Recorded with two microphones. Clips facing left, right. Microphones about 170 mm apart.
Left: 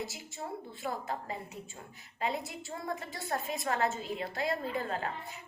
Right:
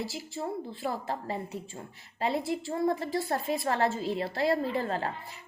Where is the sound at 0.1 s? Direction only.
30° right (ahead or behind).